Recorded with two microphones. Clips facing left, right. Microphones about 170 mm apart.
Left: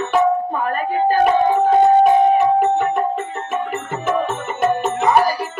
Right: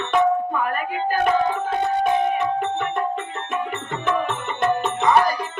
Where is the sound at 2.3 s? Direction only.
40° left (ahead or behind).